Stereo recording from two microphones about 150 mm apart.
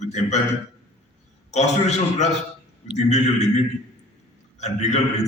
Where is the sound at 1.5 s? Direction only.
50° left (ahead or behind).